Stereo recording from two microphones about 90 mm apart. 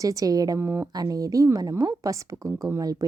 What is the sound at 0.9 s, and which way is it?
A woman's voice, 45° right (ahead or behind).